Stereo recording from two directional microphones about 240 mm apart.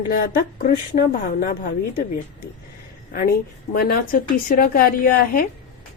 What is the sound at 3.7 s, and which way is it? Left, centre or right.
A woman's voice, left.